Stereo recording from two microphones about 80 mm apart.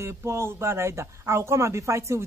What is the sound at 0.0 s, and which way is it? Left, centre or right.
A man's voice, right.